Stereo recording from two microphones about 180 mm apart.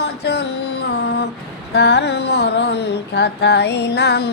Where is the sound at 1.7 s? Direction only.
70° left (ahead or behind).